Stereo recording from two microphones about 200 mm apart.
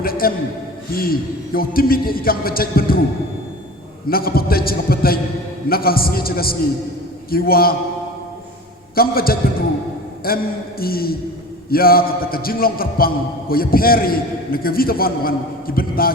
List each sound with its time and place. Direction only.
0.0 s a man's voice: 45° left (ahead or behind)
4.1 s a man's voice: 50° left (ahead or behind)
9.0 s a man's voice: 50° left (ahead or behind)